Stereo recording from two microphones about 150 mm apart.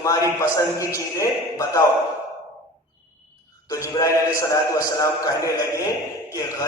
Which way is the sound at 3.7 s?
20° left (ahead or behind).